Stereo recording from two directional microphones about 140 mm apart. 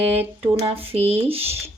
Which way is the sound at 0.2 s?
40° right (ahead or behind).